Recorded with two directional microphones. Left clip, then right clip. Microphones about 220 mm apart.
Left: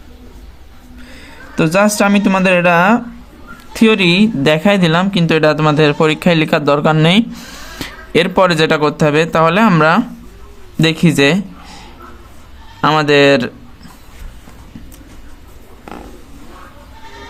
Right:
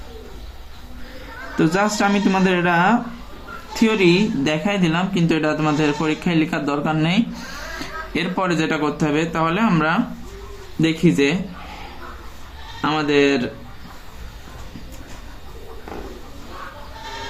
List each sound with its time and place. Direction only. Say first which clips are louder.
1.5 s speech: left 6 dB; 40° left (ahead or behind)
12.8 s speech: left 8 dB; 55° left (ahead or behind)